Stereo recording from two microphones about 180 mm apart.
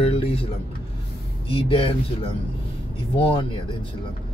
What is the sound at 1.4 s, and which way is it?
Speech, 30° left (ahead or behind).